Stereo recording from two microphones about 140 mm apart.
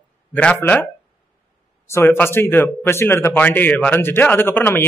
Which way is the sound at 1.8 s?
15° left (ahead or behind).